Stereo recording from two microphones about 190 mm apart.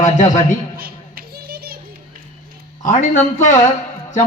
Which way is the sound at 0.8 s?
50° right (ahead or behind).